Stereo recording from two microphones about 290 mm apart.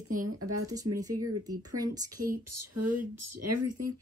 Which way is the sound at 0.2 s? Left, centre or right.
Right.